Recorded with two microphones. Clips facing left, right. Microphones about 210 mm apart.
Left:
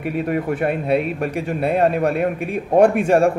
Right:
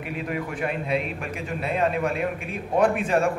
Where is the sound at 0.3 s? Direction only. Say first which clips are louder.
Left 7 dB; 50° left (ahead or behind).